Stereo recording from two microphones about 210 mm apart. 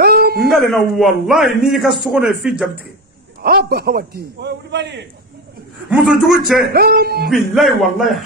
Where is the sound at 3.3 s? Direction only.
45° right (ahead or behind).